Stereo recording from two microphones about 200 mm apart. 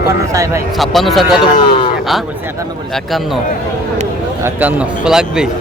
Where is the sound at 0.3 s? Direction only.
15° right (ahead or behind).